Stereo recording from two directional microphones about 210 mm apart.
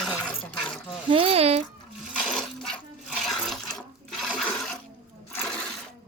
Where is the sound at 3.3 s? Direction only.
Centre (ahead or behind).